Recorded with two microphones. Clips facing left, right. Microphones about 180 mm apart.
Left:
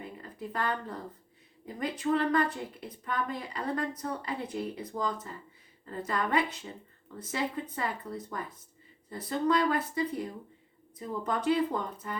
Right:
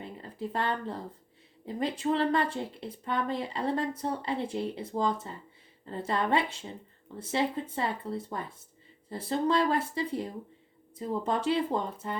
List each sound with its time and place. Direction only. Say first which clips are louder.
0.0 s a woman's voice: right 3 dB; 30° right (ahead or behind)